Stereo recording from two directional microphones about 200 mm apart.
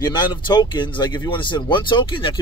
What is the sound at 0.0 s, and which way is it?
Speech, 20° left (ahead or behind).